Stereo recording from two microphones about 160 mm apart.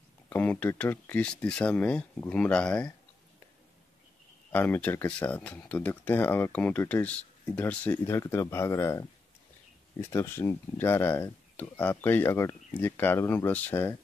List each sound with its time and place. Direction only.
0.3 s speech: 10° left (ahead or behind)
4.5 s speech: 10° left (ahead or behind)
10.0 s speech: 15° left (ahead or behind)